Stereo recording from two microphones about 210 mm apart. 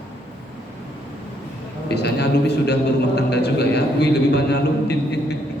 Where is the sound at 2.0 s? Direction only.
50° left (ahead or behind).